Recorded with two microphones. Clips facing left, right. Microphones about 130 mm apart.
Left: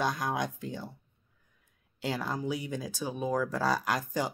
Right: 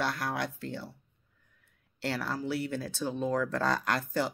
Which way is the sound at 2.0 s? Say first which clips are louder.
Even; 15° left (ahead or behind).